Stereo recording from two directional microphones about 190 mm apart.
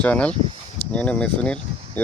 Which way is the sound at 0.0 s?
5° left (ahead or behind).